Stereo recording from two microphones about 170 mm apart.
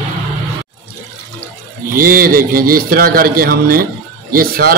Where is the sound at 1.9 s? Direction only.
60° right (ahead or behind).